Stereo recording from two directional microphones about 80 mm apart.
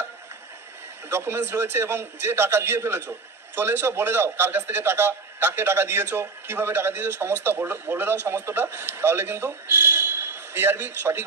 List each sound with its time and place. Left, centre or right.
1.0 s a man's voice: right